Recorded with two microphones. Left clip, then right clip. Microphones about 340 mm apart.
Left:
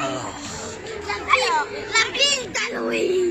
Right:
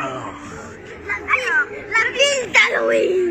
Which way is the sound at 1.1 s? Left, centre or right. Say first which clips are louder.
Even; centre.